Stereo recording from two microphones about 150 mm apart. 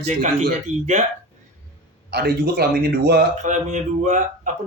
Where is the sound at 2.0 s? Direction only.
90° right.